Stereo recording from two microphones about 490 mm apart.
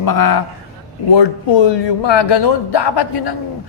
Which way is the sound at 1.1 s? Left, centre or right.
Left.